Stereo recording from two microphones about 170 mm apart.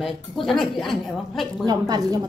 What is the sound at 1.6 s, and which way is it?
Speech, 20° right (ahead or behind).